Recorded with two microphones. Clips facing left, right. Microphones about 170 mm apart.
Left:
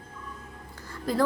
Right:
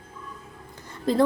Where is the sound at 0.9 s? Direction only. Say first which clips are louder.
Right 5 dB; 25° right (ahead or behind).